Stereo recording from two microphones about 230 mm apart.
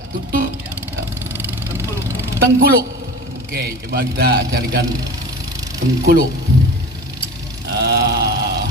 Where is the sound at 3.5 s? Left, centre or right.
Right.